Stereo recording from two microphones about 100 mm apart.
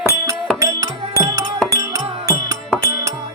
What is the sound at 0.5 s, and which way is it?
Music, 35° right (ahead or behind).